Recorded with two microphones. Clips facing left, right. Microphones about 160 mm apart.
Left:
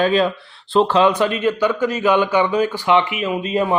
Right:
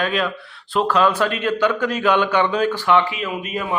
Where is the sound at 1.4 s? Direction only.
10° left (ahead or behind).